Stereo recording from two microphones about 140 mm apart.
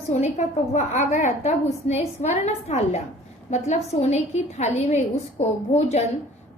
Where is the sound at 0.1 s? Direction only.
55° left (ahead or behind).